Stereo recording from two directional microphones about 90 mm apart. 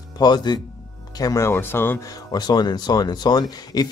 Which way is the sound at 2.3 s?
50° left (ahead or behind).